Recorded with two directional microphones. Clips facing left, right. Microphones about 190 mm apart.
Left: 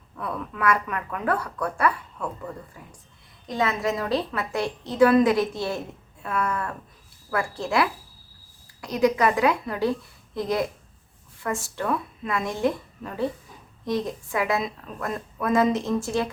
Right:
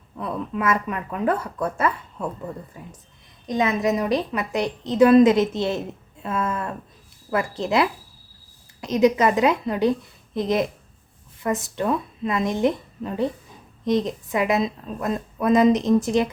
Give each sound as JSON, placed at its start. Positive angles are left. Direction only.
{"t": 0.2, "sound": "speech", "side_deg": -20}